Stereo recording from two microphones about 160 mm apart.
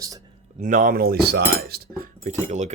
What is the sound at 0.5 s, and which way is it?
Cutlery, 55° right (ahead or behind).